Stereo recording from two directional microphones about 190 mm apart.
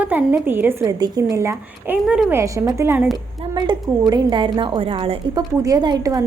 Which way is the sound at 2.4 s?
15° right (ahead or behind).